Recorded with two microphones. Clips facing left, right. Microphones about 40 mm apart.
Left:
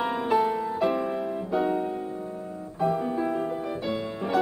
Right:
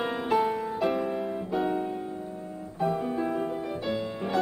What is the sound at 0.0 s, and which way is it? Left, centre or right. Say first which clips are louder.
Music: left 2 dB; centre.